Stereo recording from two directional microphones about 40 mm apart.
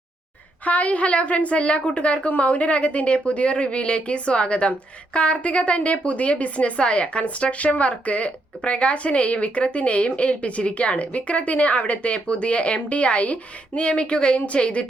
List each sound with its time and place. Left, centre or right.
0.6 s a woman's voice: left